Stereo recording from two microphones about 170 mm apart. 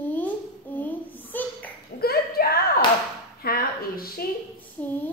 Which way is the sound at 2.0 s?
65° left (ahead or behind).